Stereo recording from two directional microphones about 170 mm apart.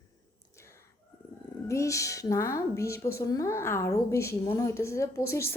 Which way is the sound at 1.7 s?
20° left (ahead or behind).